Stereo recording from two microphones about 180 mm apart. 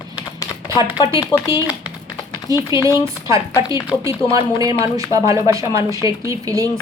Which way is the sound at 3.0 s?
15° right (ahead or behind).